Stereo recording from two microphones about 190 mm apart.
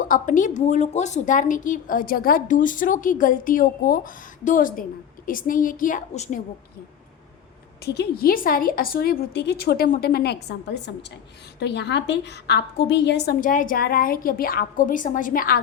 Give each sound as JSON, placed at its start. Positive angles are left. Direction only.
{"t": 0.0, "sound": "a woman's voice", "side_deg": 45}
{"t": 7.9, "sound": "a woman's voice", "side_deg": 55}
{"t": 11.6, "sound": "a woman's voice", "side_deg": 65}
{"t": 13.4, "sound": "a woman's voice", "side_deg": 45}